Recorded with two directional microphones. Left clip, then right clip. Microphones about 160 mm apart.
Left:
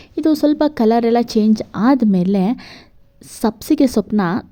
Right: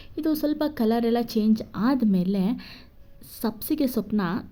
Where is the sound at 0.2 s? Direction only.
40° left (ahead or behind).